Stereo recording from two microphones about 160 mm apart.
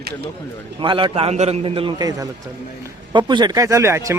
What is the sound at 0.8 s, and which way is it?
A man's voice, 30° right (ahead or behind).